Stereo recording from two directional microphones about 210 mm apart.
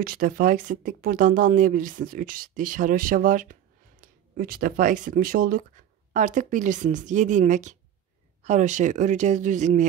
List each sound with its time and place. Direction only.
0.0 s speech: 45° right (ahead or behind)